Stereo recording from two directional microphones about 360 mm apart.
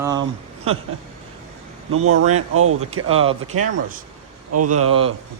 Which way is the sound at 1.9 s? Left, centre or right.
Right.